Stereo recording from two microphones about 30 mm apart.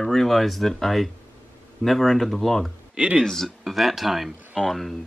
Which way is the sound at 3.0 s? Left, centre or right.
Right.